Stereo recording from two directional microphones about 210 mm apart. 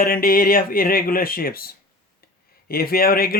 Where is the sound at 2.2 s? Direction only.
45° left (ahead or behind).